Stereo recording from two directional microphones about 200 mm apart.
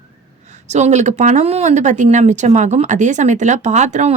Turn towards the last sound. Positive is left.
turn(degrees=-35)  # may be behind; listen again after turning